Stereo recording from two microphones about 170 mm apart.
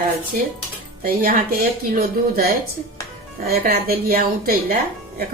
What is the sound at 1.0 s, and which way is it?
A woman's voice, 60° right (ahead or behind).